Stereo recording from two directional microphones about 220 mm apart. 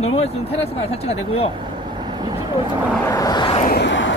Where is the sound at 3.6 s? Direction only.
45° left (ahead or behind).